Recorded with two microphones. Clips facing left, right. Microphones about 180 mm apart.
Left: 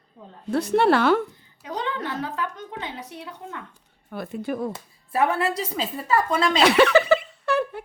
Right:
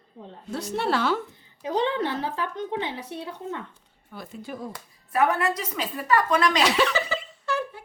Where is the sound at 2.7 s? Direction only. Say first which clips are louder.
Right 4 dB; 25° right (ahead or behind).